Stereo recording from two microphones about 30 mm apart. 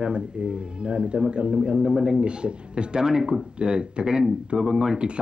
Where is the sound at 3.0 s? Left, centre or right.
Right.